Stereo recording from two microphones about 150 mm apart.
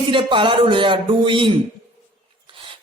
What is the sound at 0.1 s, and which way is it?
A man's voice, 35° right (ahead or behind).